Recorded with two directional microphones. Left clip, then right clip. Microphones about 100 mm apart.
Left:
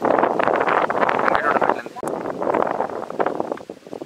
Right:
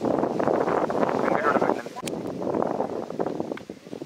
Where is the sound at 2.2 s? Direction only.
55° left (ahead or behind).